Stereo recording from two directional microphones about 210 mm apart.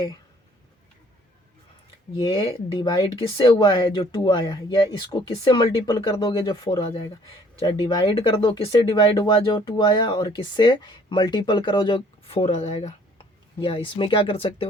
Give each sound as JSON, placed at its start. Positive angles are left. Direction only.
{"t": 2.1, "sound": "speech", "side_deg": 20}